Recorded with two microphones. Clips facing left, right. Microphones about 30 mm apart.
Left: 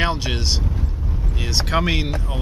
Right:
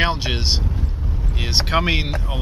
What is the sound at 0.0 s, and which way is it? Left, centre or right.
Vehicle, centre.